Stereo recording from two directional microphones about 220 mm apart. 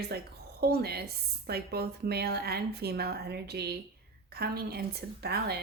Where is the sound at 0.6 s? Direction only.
45° right (ahead or behind).